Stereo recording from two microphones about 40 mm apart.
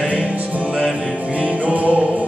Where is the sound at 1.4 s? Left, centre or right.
Right.